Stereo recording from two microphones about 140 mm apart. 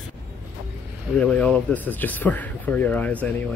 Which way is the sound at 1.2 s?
10° left (ahead or behind).